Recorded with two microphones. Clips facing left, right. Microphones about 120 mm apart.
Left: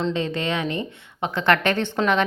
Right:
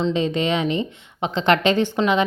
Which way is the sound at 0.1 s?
20° right (ahead or behind).